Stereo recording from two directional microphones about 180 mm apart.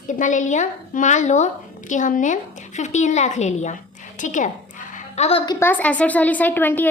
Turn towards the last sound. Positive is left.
turn(degrees=10)  # may be behind; listen again after turning